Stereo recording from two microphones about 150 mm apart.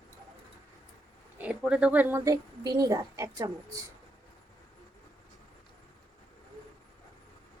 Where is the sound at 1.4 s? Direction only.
5° right (ahead or behind).